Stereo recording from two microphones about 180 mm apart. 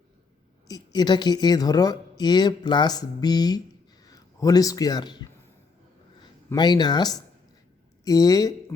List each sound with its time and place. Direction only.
0.7 s a man's voice: 25° left (ahead or behind)
6.5 s speech: 25° left (ahead or behind)